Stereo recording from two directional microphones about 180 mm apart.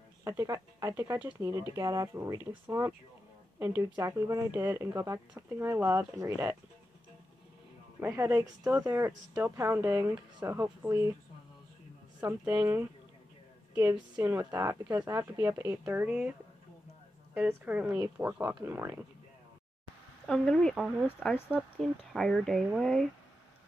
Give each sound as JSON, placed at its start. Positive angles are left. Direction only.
{"t": 0.2, "sound": "a woman's voice", "side_deg": -15}
{"t": 8.0, "sound": "a woman's voice", "side_deg": -15}
{"t": 12.2, "sound": "a woman's voice", "side_deg": -15}
{"t": 14.1, "sound": "a woman's voice", "side_deg": -15}
{"t": 20.2, "sound": "speech", "side_deg": 0}